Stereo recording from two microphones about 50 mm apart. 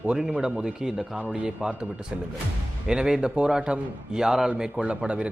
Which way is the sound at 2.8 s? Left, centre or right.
Centre.